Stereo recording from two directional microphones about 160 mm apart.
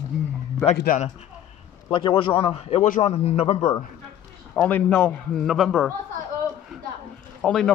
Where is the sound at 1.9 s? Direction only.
30° left (ahead or behind).